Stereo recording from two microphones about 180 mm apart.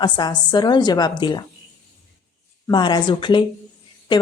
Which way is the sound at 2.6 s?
25° left (ahead or behind).